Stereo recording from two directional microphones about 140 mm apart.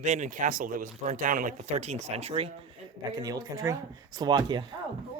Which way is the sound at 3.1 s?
30° right (ahead or behind).